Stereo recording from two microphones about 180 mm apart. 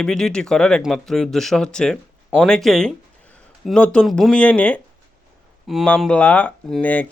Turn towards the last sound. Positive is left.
turn(degrees=10)  # may be behind; listen again after turning